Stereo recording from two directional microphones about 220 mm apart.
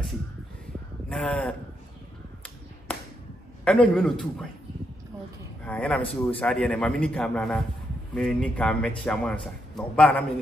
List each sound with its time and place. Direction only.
1.0 s speech: 5° left (ahead or behind)
3.6 s a man's voice: 5° left (ahead or behind)
5.7 s a man's voice: 5° left (ahead or behind)